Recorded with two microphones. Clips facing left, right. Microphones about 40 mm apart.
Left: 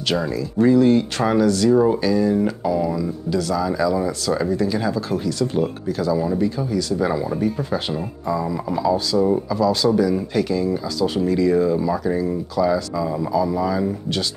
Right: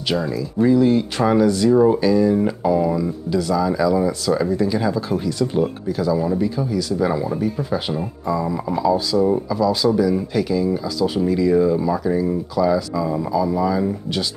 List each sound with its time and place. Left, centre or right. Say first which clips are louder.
0.1 s speech: even; centre
1.4 s speech: right 1 dB; centre
1.7 s speech: right 2 dB; centre